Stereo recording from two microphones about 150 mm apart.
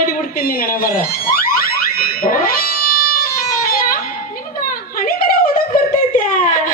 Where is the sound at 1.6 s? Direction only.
75° left (ahead or behind).